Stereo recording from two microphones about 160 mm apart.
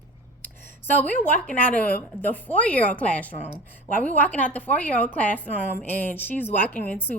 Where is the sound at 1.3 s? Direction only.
10° left (ahead or behind).